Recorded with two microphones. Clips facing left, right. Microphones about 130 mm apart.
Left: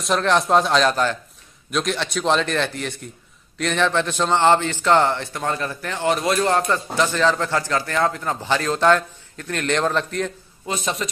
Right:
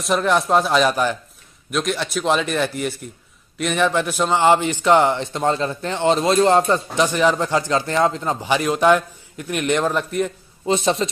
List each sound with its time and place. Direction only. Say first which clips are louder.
0.0 s a man's voice: right 1 dB; centre (ahead or behind)
10.6 s a man's voice: right 7 dB; 25° right (ahead or behind)